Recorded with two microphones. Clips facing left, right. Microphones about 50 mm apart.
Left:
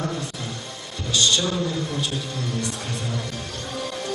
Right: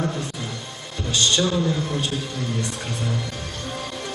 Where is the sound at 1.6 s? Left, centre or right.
Right.